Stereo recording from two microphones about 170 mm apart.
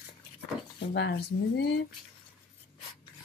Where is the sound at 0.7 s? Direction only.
90° left.